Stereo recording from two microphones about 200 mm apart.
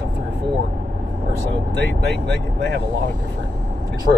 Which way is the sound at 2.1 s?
60° right (ahead or behind).